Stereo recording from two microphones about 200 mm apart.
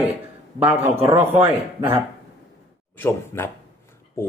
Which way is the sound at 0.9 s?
30° right (ahead or behind).